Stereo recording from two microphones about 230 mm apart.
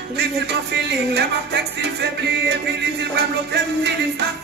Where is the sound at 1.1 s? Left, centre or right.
Right.